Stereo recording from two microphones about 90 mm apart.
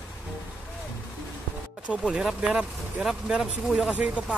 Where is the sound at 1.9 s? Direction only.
10° right (ahead or behind).